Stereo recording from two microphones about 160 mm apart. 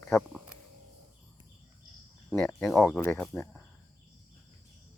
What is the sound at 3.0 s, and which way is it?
Speech, 15° left (ahead or behind).